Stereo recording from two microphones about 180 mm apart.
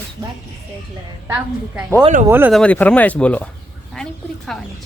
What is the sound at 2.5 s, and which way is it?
Speech, 5° left (ahead or behind).